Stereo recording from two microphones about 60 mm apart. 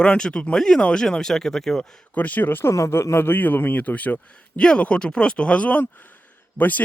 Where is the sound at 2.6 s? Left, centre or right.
Left.